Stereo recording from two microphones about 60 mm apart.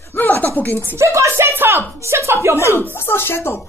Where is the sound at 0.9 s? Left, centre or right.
Right.